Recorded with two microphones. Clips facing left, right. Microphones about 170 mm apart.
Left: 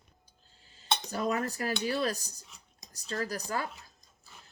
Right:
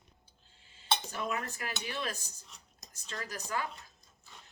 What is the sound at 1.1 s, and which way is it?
Speech, 40° left (ahead or behind).